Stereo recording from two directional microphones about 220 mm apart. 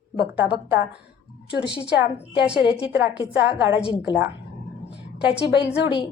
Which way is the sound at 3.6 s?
5° right (ahead or behind).